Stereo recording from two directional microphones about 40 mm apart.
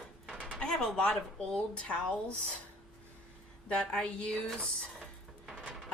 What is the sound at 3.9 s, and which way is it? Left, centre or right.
Speech, centre.